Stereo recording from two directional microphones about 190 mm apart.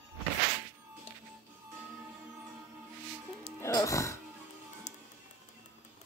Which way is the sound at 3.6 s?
15° left (ahead or behind).